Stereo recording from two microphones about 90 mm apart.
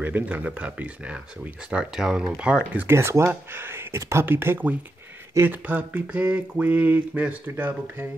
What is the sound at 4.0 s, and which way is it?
Speech, 30° right (ahead or behind).